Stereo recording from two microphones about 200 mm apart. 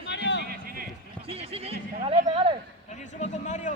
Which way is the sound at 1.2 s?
30° right (ahead or behind).